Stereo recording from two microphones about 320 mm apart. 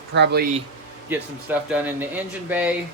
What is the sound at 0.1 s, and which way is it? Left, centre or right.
Speech, right.